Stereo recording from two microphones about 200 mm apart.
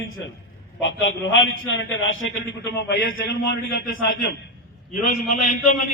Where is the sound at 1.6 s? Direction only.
70° left (ahead or behind).